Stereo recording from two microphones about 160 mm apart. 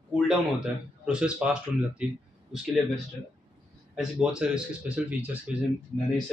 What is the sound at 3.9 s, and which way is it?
Speech, 5° right (ahead or behind).